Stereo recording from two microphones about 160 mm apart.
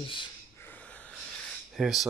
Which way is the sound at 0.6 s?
10° left (ahead or behind).